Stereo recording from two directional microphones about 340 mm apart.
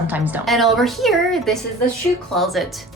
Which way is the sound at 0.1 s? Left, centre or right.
Centre.